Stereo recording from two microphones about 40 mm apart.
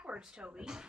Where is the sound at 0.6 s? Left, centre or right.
Centre.